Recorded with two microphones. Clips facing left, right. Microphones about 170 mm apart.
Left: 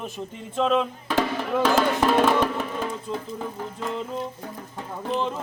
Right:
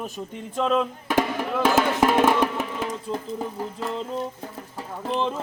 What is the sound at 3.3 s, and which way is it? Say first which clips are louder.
Speech: right 2 dB; 5° right (ahead or behind).